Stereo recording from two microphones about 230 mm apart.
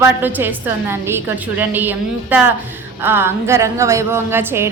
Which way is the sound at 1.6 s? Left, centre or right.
Centre.